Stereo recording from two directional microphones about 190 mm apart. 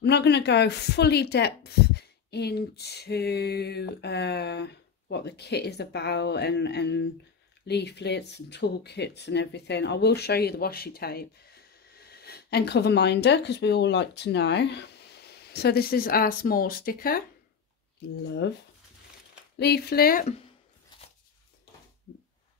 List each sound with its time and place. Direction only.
0.0 s speech: 65° left (ahead or behind)
19.6 s speech: 55° left (ahead or behind)